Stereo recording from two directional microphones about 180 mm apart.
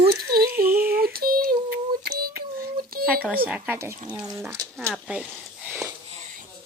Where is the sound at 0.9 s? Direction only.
55° right (ahead or behind).